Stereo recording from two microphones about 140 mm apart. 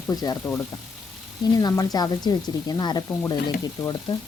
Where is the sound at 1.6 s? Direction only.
30° left (ahead or behind).